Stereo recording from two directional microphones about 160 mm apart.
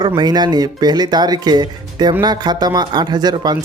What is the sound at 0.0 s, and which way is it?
Speech, 25° right (ahead or behind).